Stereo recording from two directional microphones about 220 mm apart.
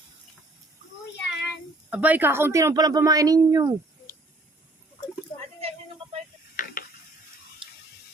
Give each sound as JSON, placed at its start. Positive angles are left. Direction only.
{"t": 1.2, "sound": "child singing", "side_deg": 50}
{"t": 1.9, "sound": "a woman's voice", "side_deg": -5}
{"t": 5.5, "sound": "a sound", "side_deg": -25}